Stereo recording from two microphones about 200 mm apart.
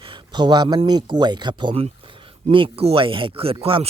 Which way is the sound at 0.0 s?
25° right (ahead or behind).